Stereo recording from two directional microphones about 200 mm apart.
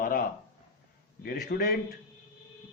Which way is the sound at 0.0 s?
45° left (ahead or behind).